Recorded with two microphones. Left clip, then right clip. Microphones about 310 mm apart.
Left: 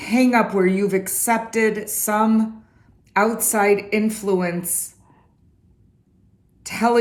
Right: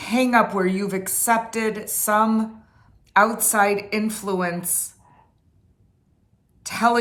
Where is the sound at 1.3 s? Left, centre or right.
Right.